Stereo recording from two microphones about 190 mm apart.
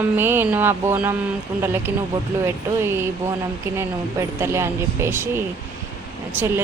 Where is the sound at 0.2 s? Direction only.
10° right (ahead or behind).